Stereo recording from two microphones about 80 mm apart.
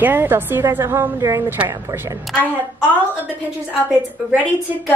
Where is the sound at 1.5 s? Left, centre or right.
Right.